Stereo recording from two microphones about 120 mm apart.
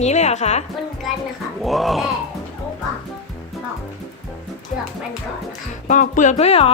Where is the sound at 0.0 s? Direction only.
70° left (ahead or behind).